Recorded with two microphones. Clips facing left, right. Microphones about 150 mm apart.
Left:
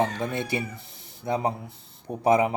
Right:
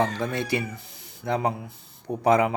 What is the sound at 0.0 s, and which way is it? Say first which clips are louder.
Speech: right 1 dB; 20° left (ahead or behind).